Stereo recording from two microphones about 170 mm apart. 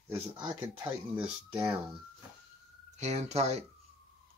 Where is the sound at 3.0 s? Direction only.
40° right (ahead or behind).